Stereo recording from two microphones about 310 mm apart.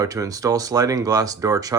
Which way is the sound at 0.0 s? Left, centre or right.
Centre.